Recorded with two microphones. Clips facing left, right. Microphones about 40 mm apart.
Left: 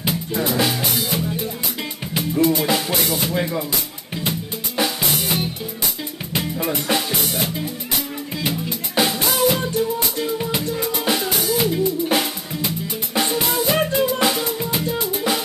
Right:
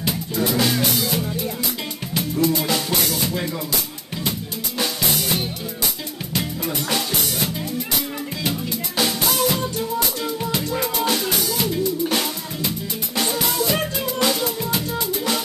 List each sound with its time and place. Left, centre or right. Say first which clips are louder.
0.0 s music: left 1 dB; left